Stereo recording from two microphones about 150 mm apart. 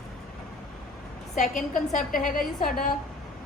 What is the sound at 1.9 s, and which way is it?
A woman's voice, 65° left (ahead or behind).